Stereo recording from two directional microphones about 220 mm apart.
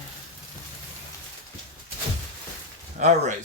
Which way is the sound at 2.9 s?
35° right (ahead or behind).